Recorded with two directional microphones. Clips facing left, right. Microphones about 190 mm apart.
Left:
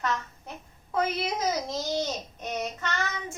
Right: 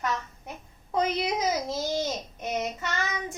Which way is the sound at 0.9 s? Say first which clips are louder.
Right 2 dB; 15° right (ahead or behind).